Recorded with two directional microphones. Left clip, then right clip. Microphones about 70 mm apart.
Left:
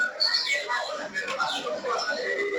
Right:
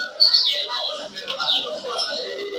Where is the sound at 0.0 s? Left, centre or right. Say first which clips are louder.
Right 7 dB; right.